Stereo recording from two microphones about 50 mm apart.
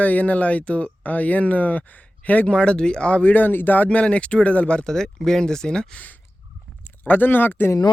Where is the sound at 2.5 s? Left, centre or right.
Centre.